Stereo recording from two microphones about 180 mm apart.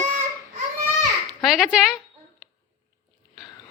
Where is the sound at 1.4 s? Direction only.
Centre (ahead or behind).